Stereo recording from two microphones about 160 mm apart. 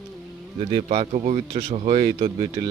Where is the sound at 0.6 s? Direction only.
40° right (ahead or behind).